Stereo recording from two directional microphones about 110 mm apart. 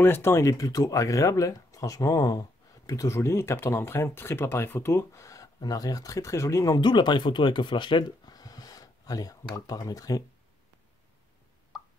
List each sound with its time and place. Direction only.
0.0 s speech: 20° left (ahead or behind)